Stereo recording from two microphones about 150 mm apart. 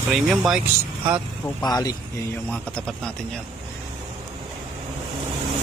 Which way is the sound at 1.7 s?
25° left (ahead or behind).